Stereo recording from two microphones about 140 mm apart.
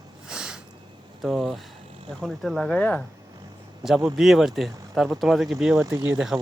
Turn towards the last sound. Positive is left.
turn(degrees=-5)  # may be behind; listen again after turning